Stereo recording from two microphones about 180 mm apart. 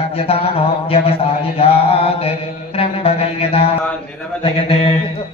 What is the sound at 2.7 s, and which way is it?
Mantra, 35° left (ahead or behind).